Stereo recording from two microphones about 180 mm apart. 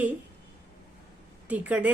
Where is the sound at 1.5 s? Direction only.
10° right (ahead or behind).